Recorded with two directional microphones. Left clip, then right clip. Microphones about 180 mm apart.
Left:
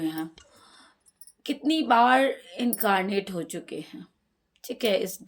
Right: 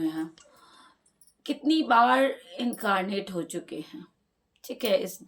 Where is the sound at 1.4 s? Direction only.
30° left (ahead or behind).